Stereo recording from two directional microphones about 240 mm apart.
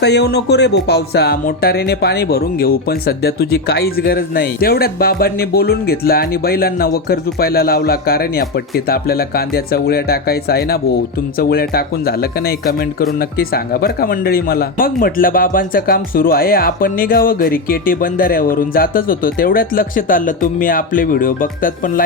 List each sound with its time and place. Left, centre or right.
0.0 s speech: left